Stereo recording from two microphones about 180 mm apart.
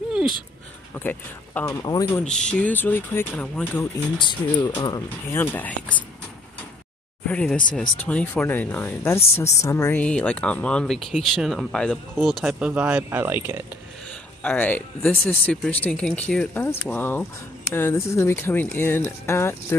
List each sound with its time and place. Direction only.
0.9 s speech: 10° left (ahead or behind)
1.7 s speech: 20° left (ahead or behind)
2.2 s speech: 5° left (ahead or behind)
4.2 s speech: 25° left (ahead or behind); by 6.0 s 10° left (ahead or behind)
7.2 s speech: 5° left (ahead or behind); by 13.6 s 15° right (ahead or behind)
14.4 s speech: 10° left (ahead or behind)